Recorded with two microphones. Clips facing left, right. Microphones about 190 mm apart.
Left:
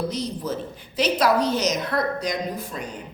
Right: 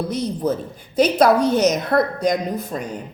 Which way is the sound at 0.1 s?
55° right (ahead or behind).